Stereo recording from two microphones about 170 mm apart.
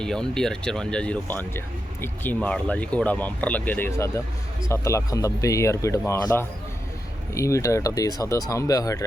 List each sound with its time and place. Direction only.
0.0 s speech: 5° left (ahead or behind); by 9.0 s 20° left (ahead or behind)